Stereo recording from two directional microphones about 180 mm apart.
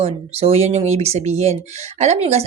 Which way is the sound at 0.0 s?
35° right (ahead or behind).